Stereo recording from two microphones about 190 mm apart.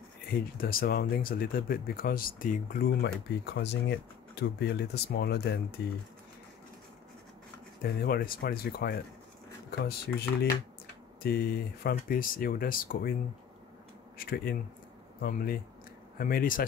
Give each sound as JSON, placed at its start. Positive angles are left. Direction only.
{"t": 0.3, "sound": "speech", "side_deg": 50}
{"t": 7.8, "sound": "speech", "side_deg": 50}
{"t": 11.2, "sound": "speech", "side_deg": 50}
{"t": 14.1, "sound": "speech", "side_deg": 50}